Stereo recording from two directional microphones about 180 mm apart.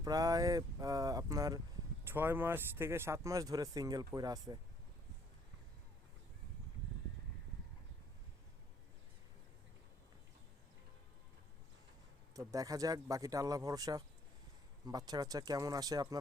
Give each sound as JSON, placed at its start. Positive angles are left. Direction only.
{"t": 0.0, "sound": "speech", "side_deg": -20}
{"t": 12.4, "sound": "speech", "side_deg": -20}